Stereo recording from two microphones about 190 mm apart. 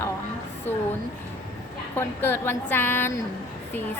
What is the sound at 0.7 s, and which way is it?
Speech, 10° left (ahead or behind).